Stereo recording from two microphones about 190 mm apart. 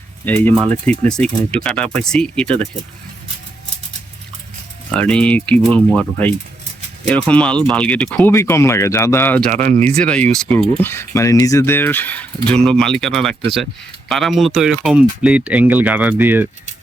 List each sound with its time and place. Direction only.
0.4 s speech: 5° left (ahead or behind)
4.9 s speech: 5° left (ahead or behind)
9.5 s speech: 40° right (ahead or behind)
10.0 s speech: 5° left (ahead or behind); by 16.5 s 10° right (ahead or behind)